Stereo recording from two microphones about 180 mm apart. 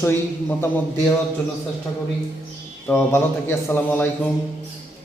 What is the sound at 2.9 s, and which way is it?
A man's voice, 15° left (ahead or behind).